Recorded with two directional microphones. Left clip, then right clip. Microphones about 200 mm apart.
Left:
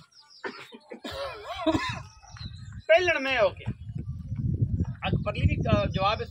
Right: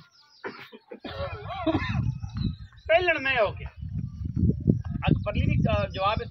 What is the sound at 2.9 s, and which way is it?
Speech, 45° left (ahead or behind).